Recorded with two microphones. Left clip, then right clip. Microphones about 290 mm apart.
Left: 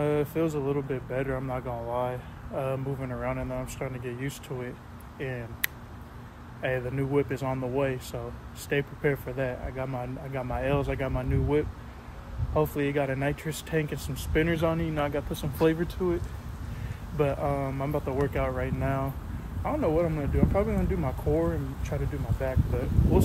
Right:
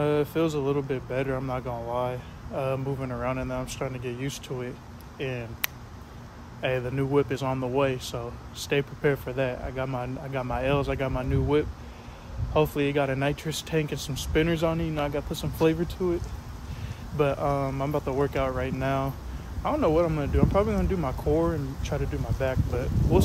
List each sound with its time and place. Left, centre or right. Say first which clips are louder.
0.0 s a sound: right 2 dB; centre
0.6 s speech: right 2 dB; centre
13.9 s speech: right 4 dB; right
14.3 s speech: right 1 dB; centre
17.2 s speech: right 2 dB; centre